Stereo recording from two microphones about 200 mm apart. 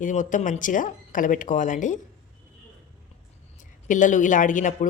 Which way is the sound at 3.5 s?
40° left (ahead or behind).